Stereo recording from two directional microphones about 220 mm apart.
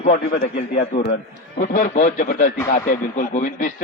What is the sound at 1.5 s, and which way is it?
A man's voice, 40° left (ahead or behind).